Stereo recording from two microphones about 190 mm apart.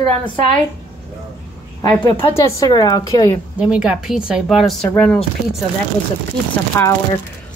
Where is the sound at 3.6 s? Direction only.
5° right (ahead or behind).